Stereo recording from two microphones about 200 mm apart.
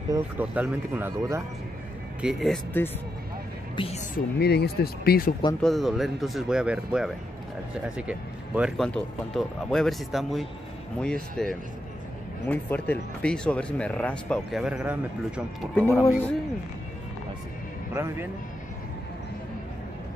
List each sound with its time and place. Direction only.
0.1 s speech: 10° right (ahead or behind)
2.2 s speech: centre (ahead or behind)
3.7 s speech: 30° left (ahead or behind)
4.4 s speech: 55° left (ahead or behind)
5.6 s speech: centre (ahead or behind)
8.1 s speech: 5° right (ahead or behind)
15.7 s speech: 10° left (ahead or behind)